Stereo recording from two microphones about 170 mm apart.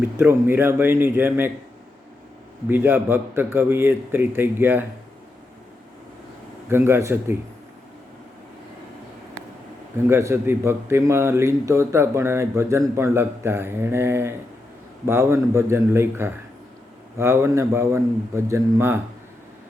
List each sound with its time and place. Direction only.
0.2 s speech: 15° right (ahead or behind)
2.6 s speech: 10° right (ahead or behind)
6.7 s speech: 15° right (ahead or behind)
10.1 s speech: 15° right (ahead or behind)